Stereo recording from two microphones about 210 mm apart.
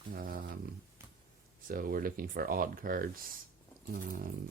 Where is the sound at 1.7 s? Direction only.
40° right (ahead or behind).